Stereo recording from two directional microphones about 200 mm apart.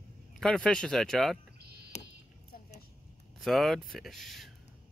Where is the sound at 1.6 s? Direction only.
55° right (ahead or behind).